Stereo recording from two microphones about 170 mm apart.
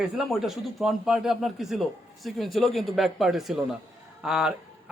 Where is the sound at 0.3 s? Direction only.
Centre (ahead or behind).